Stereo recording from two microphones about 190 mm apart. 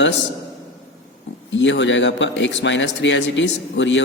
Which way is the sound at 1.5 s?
75° left (ahead or behind).